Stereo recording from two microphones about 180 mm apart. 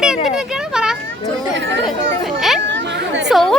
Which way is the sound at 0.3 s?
5° right (ahead or behind).